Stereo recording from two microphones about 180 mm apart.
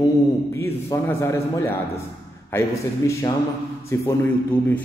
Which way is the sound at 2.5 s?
10° left (ahead or behind).